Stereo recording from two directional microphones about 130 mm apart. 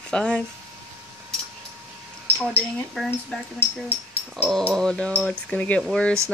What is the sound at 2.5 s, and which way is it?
Speech, centre (ahead or behind).